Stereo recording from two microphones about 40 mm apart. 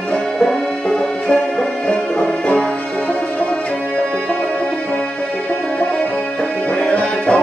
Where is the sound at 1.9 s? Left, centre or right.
Left.